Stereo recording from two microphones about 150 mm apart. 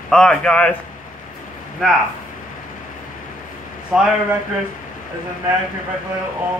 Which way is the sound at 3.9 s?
5° right (ahead or behind).